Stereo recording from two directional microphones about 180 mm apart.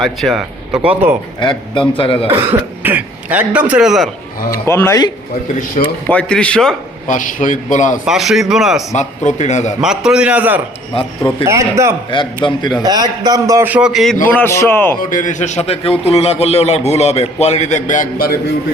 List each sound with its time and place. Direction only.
0.0 s speech: centre (ahead or behind)
1.4 s a man's voice: 25° left (ahead or behind)
2.2 s speech: 30° right (ahead or behind)
2.8 s a man's voice: 10° right (ahead or behind)
4.5 s a man's voice: 15° left (ahead or behind)
6.1 s speech: 5° left (ahead or behind)
7.1 s a man's voice: 45° left (ahead or behind)
8.0 s speech: centre (ahead or behind)
8.9 s a man's voice: 40° left (ahead or behind)
9.8 s a man's voice: 5° right (ahead or behind)
12.1 s a man's voice: 25° left (ahead or behind)
12.8 s a man's voice: 20° right (ahead or behind); by 14.2 s centre (ahead or behind)
14.3 s a man's voice: 10° left (ahead or behind)
15.1 s a man's voice: 45° left (ahead or behind)